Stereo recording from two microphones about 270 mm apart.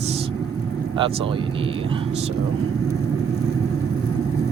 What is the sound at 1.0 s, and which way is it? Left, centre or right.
Speech, centre.